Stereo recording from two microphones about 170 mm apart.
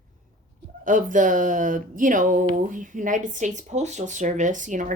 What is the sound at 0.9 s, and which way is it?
Speech, 50° right (ahead or behind).